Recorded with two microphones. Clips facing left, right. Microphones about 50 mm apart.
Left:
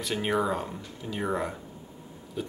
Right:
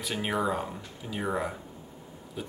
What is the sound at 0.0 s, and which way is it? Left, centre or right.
Speech, centre.